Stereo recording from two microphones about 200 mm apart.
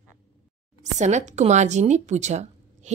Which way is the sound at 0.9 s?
35° right (ahead or behind).